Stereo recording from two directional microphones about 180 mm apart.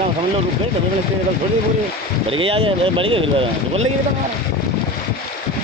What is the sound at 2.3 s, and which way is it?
Speech, 30° right (ahead or behind).